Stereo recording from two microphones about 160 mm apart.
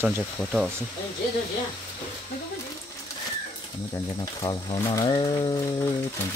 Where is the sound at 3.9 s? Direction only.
20° left (ahead or behind).